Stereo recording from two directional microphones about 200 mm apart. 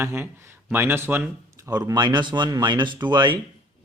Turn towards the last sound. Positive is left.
turn(degrees=-20)  # may be behind; listen again after turning